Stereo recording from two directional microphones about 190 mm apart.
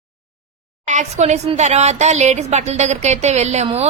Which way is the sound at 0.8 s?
40° right (ahead or behind).